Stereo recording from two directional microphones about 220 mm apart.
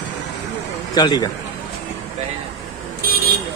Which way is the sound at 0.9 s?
20° left (ahead or behind).